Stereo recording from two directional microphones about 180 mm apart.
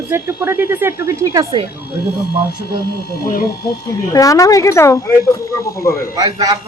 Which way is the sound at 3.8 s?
20° left (ahead or behind).